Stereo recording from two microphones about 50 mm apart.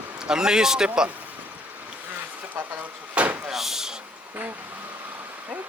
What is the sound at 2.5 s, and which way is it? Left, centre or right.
Door, right.